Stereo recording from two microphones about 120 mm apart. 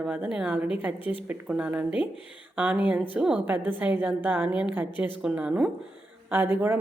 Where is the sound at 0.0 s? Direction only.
10° right (ahead or behind).